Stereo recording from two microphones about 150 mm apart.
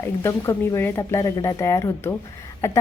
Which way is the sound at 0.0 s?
20° left (ahead or behind).